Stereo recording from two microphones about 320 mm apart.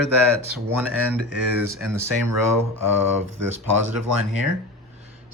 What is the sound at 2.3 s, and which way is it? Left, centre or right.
Speech, right.